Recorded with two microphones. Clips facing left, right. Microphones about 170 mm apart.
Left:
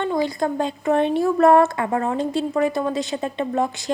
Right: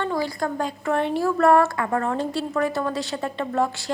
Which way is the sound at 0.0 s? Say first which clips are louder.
Left 3 dB; 20° left (ahead or behind).